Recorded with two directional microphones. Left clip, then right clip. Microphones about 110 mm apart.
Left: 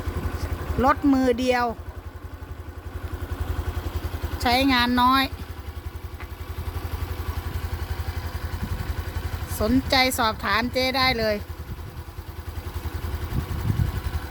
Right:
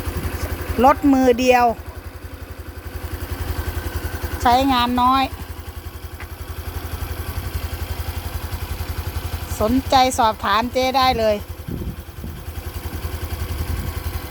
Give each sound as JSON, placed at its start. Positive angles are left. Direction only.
{"t": 0.3, "sound": "speech", "side_deg": -30}
{"t": 4.4, "sound": "a woman's voice", "side_deg": 0}
{"t": 9.6, "sound": "speech", "side_deg": 0}